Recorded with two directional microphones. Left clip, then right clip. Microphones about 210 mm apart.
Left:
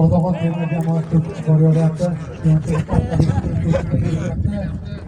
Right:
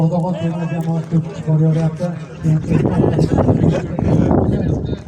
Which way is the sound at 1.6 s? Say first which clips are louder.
Left 2 dB; 50° left (ahead or behind).